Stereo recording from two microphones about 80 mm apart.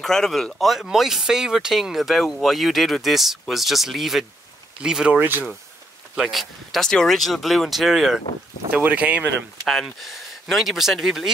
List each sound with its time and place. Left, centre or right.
0.0 s speech: centre
6.2 s speech: centre
8.7 s speech: centre
9.7 s speech: centre